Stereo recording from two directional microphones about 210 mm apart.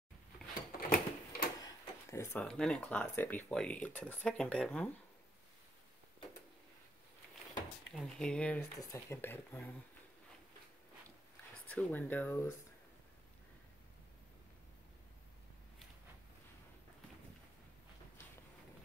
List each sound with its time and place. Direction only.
0.7 s a sound: 40° left (ahead or behind)
1.6 s speech: 15° left (ahead or behind)
7.9 s speech: centre (ahead or behind)
11.6 s speech: 10° left (ahead or behind)